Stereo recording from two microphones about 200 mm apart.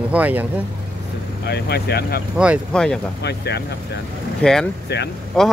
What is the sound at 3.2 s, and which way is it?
Speech, 55° left (ahead or behind).